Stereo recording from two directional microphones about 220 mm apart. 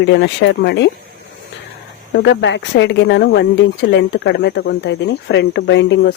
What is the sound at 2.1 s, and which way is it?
A woman's voice, 55° left (ahead or behind).